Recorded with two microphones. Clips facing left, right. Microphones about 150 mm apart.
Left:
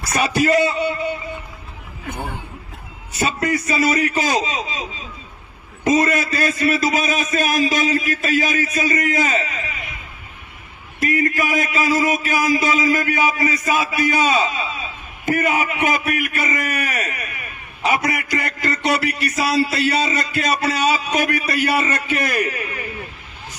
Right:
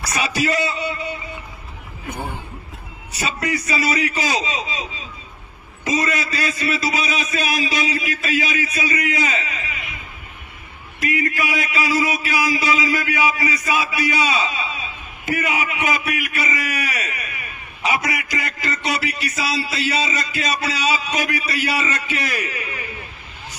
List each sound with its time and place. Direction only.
0.1 s speech: 55° left (ahead or behind)
3.2 s speech: 50° left (ahead or behind)
5.8 s speech: 55° left (ahead or behind)
11.0 s speech: 45° left (ahead or behind)